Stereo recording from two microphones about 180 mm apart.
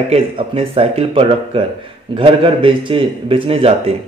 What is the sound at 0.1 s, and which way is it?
A man's voice, 30° right (ahead or behind).